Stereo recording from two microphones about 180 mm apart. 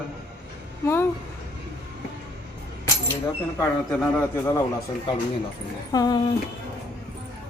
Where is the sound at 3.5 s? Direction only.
10° left (ahead or behind).